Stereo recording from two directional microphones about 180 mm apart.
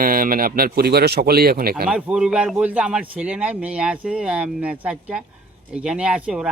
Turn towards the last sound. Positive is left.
turn(degrees=-5)  # may be behind; listen again after turning